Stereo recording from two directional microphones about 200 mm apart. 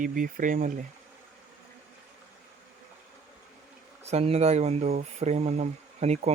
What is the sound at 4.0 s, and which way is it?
Speech, 30° right (ahead or behind).